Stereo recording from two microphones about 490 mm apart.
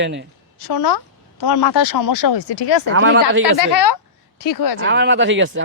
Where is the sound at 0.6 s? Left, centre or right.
Left.